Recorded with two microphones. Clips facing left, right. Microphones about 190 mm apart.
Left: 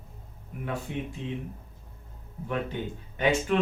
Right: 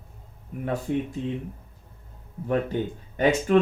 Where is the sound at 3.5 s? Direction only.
45° right (ahead or behind).